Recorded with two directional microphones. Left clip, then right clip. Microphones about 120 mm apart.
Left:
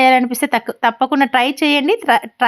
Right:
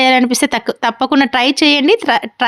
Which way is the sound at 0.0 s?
35° right (ahead or behind).